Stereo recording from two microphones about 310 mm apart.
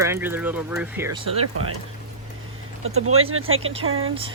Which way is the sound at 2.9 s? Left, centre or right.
Right.